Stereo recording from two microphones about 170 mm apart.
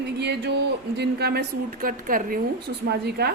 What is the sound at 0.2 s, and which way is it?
A woman's voice, 80° right.